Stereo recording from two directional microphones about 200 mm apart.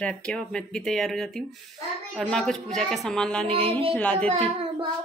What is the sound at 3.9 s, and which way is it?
Music, 5° left (ahead or behind).